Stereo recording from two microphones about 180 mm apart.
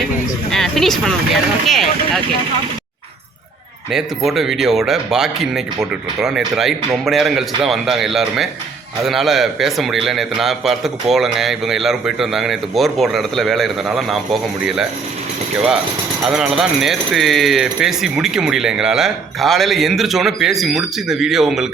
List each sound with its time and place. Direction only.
0.5 s speech: centre (ahead or behind)
3.9 s speech: centre (ahead or behind)
16.2 s speech: 5° right (ahead or behind)